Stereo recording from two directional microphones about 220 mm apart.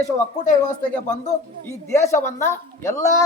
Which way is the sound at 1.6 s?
10° left (ahead or behind).